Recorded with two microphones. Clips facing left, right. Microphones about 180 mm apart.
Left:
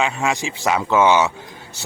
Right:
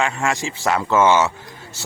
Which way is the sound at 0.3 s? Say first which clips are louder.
Even; 20° left (ahead or behind).